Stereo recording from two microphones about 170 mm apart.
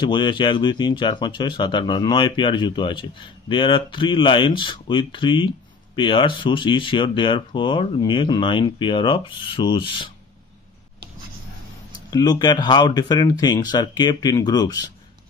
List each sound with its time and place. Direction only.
0.0 s speech: 25° left (ahead or behind)
12.1 s speech: 25° left (ahead or behind)